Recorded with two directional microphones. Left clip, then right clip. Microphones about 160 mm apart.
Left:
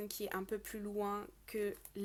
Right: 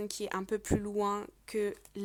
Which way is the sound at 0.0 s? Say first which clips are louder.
Right 5 dB; 30° right (ahead or behind).